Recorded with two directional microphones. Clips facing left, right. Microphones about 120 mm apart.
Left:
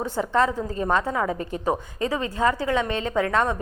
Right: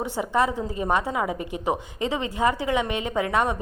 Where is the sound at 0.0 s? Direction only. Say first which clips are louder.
Left 1 dB; 15° right (ahead or behind).